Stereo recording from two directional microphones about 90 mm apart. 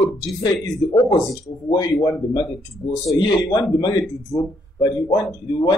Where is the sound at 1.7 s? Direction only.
45° left (ahead or behind).